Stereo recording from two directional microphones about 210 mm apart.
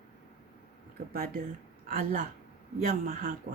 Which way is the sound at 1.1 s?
45° right (ahead or behind).